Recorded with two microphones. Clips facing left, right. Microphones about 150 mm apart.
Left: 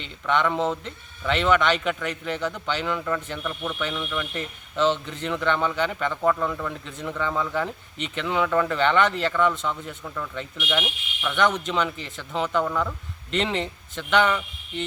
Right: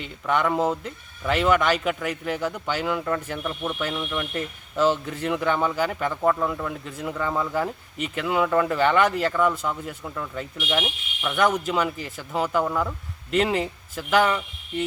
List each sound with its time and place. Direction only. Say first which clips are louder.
0.0 s speech: even; 5° right (ahead or behind)
10.7 s speech: right 1 dB; 20° right (ahead or behind)
11.3 s speech: right 1 dB; 5° right (ahead or behind)